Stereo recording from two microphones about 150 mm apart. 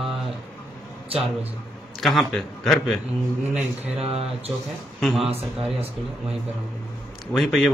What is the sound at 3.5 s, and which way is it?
Speech, 45° right (ahead or behind).